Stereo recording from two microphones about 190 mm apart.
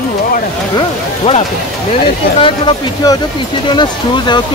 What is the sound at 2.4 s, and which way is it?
Speech, 25° left (ahead or behind).